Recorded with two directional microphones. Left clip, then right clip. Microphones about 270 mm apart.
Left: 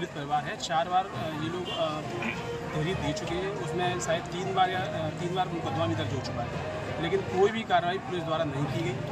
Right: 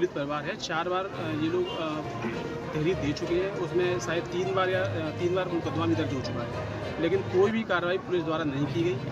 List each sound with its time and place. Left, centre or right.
0.3 s speech: centre
3.8 s speech: centre
7.0 s speech: centre